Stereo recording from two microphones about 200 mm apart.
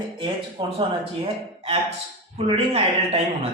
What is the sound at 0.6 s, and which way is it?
Speech, 25° right (ahead or behind).